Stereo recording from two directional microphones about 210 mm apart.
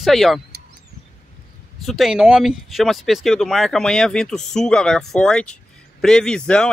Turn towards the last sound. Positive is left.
turn(degrees=5)  # may be behind; listen again after turning